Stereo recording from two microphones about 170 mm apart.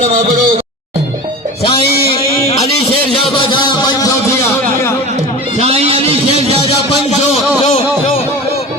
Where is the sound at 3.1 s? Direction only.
30° left (ahead or behind).